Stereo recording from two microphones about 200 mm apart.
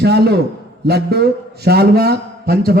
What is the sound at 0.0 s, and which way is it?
A man's voice, 55° right (ahead or behind).